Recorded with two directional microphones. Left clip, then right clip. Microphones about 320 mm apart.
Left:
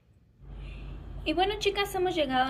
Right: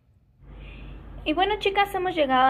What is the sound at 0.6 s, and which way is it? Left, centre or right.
A woman's voice, centre.